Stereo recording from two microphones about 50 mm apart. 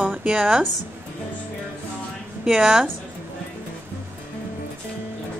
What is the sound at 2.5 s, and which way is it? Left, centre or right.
Speech, centre.